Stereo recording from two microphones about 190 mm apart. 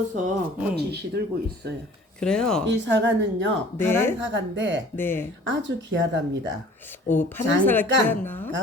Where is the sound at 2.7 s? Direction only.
70° right (ahead or behind).